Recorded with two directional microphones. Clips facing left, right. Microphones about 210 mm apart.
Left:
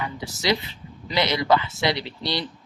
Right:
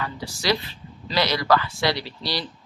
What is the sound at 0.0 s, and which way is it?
A woman's voice, 20° left (ahead or behind).